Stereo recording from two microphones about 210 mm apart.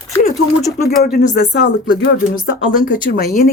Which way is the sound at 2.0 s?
40° left (ahead or behind).